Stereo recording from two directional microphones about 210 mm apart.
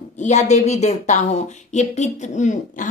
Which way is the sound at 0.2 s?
35° left (ahead or behind).